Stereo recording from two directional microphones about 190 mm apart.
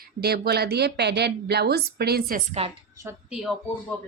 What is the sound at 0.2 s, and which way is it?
A woman's voice, 55° right (ahead or behind).